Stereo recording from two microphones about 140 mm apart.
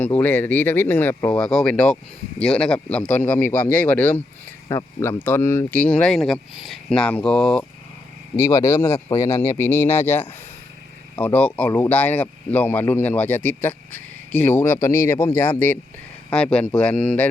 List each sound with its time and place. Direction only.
0.0 s speech: 10° left (ahead or behind)
8.4 s speech: 20° left (ahead or behind)